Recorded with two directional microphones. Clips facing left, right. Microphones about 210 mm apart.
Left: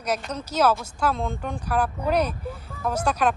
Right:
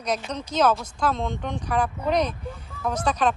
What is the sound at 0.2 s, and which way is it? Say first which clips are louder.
Speech: even; 5° left (ahead or behind).